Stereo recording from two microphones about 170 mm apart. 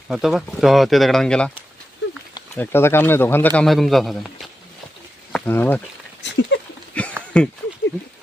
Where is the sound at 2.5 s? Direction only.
10° left (ahead or behind).